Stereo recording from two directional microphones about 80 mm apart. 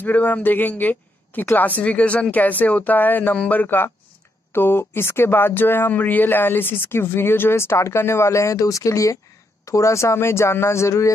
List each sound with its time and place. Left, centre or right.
0.0 s speech: centre; by 11.1 s left